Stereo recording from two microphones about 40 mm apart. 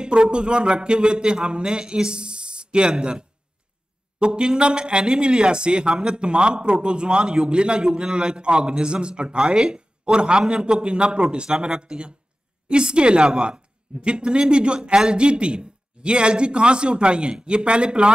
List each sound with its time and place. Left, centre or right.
0.0 s speech: right